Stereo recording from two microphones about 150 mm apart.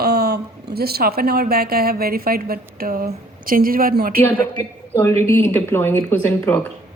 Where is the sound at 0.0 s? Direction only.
90° right.